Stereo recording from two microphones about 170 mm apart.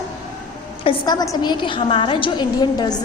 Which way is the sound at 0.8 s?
25° left (ahead or behind).